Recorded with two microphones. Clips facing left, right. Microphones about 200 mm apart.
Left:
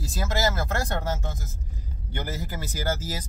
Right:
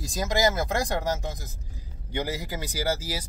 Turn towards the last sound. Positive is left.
turn(degrees=-10)  # may be behind; listen again after turning